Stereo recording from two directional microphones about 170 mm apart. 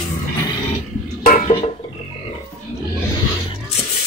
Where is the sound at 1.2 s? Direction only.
55° left (ahead or behind).